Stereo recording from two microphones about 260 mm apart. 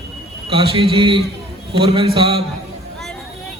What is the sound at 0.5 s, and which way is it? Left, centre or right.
A man's voice, right.